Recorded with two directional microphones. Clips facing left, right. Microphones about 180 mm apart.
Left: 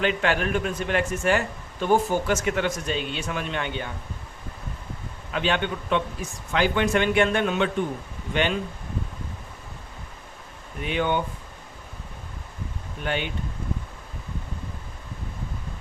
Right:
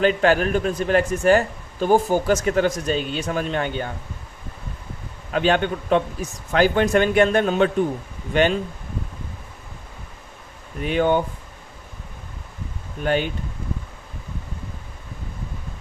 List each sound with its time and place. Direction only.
0.0 s a man's voice: 40° right (ahead or behind)
5.3 s a man's voice: 45° right (ahead or behind)
10.8 s a man's voice: 40° right (ahead or behind)
13.0 s a man's voice: 40° right (ahead or behind)